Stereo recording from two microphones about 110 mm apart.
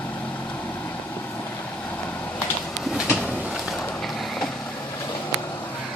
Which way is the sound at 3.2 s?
5° left (ahead or behind).